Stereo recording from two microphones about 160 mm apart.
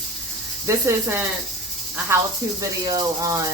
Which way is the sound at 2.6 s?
25° right (ahead or behind).